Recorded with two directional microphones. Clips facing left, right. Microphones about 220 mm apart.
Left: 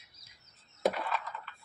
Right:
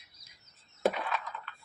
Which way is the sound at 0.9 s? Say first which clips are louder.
Even; centre (ahead or behind).